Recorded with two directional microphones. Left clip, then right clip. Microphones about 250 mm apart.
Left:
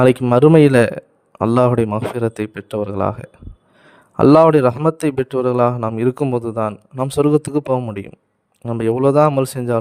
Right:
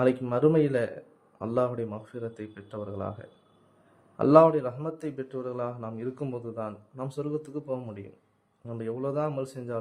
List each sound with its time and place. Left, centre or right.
0.0 s a man's voice: left